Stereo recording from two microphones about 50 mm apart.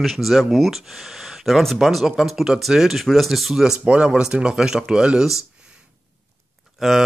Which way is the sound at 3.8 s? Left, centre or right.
Right.